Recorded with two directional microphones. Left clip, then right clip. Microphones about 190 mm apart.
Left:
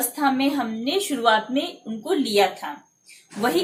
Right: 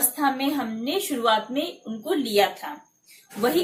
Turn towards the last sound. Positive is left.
turn(degrees=20)  # may be behind; listen again after turning